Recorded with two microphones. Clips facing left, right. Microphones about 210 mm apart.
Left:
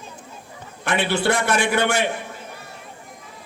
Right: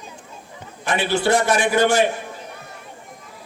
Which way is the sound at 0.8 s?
60° left (ahead or behind).